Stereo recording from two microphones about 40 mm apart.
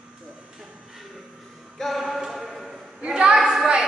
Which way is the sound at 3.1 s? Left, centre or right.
Right.